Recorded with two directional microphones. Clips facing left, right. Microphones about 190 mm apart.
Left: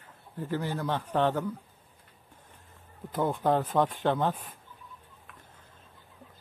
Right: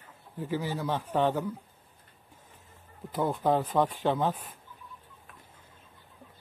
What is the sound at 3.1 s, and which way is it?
Speech, 5° right (ahead or behind).